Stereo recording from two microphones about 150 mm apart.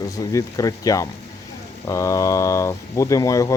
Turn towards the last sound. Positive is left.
turn(degrees=20)  # may be behind; listen again after turning